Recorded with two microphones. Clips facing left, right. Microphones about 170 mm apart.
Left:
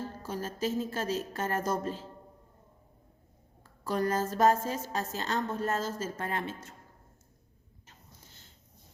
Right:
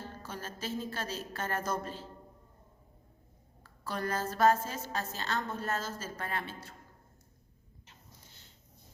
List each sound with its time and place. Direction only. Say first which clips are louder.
0.3 s a woman's voice: left 7 dB; 40° left (ahead or behind)
3.8 s a woman's voice: left 5 dB; 40° left (ahead or behind)
6.1 s a woman's voice: left 3 dB; 25° left (ahead or behind)